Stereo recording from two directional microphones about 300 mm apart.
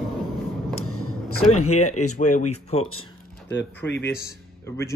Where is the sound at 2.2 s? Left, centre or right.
Left.